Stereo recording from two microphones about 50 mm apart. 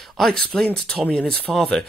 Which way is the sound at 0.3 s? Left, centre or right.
Centre.